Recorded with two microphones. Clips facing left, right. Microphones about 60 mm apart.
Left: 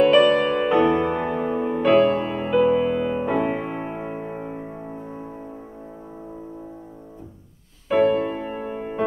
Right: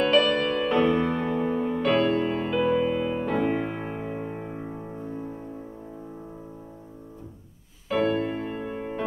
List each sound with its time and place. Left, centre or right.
0.0 s music: centre
7.9 s music: left